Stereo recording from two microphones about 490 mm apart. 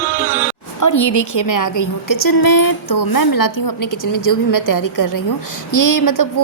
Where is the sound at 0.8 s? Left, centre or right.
Left.